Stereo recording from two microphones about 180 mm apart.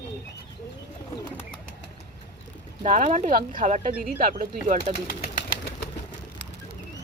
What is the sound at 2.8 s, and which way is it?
Speech, 45° right (ahead or behind).